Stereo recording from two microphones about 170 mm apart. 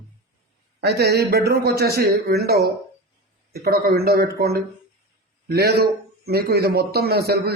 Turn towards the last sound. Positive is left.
turn(degrees=-65)  # may be behind; listen again after turning